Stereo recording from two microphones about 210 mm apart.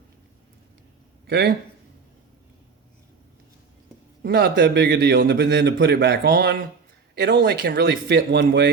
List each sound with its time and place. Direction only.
1.3 s a man's voice: 55° right (ahead or behind)
4.2 s a man's voice: 50° right (ahead or behind)